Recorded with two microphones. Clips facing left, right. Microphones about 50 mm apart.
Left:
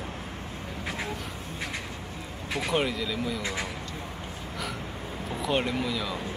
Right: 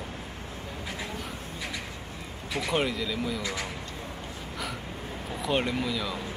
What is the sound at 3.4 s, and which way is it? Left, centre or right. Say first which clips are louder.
Speech: left 1 dB; left.